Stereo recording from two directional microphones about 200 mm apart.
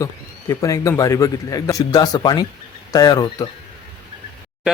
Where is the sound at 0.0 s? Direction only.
15° left (ahead or behind).